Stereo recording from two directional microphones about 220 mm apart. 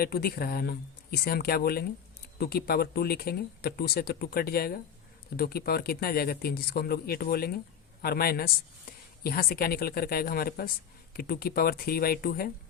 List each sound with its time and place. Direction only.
0.0 s speech: 45° left (ahead or behind)